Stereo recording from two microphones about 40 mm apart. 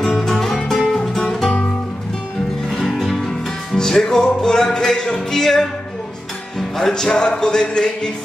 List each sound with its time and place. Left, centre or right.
0.0 s music: centre
2.7 s music: centre
6.8 s music: centre
7.6 s speech: centre